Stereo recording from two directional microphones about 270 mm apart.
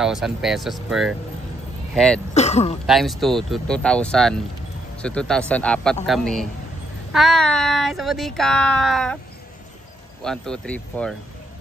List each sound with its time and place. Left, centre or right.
0.0 s speech: centre
2.3 s speech: left
2.9 s speech: centre
10.2 s speech: centre